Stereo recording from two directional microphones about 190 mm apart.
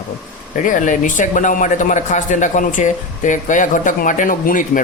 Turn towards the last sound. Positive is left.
turn(degrees=45)  # may be behind; listen again after turning